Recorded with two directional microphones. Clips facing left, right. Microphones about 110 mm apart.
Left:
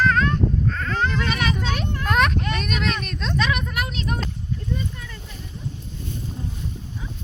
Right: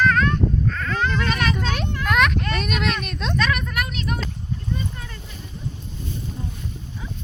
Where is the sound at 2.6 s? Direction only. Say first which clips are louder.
Right 1 dB; 5° right (ahead or behind).